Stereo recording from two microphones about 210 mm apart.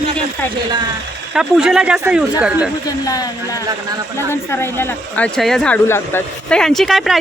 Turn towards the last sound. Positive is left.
turn(degrees=0)  # may be behind; listen again after turning